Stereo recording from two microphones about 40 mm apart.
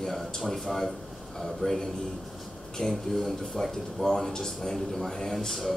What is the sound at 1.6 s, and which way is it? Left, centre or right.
Speech, left.